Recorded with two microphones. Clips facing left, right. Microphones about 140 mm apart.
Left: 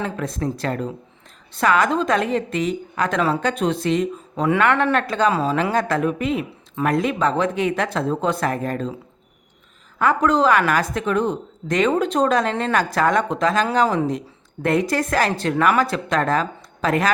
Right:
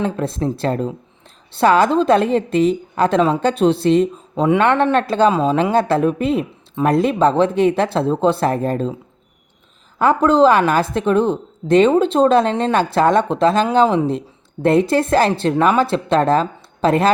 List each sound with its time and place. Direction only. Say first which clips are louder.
0.0 s a woman's voice: right 5 dB; 30° right (ahead or behind)
10.0 s a woman's voice: right 5 dB; 30° right (ahead or behind)